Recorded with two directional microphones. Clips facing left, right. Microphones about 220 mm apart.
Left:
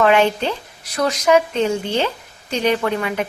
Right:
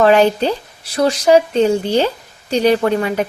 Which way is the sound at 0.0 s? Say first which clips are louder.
Right 4 dB; 35° right (ahead or behind).